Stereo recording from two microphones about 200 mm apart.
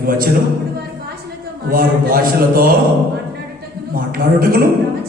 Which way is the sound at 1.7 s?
45° right (ahead or behind).